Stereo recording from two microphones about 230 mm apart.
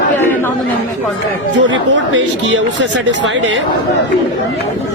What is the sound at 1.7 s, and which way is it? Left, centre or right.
Speech, right.